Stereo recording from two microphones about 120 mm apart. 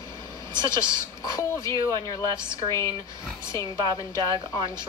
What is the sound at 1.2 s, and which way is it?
A woman's voice, 25° left (ahead or behind).